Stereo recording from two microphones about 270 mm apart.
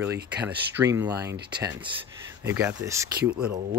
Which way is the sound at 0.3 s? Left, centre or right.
Centre.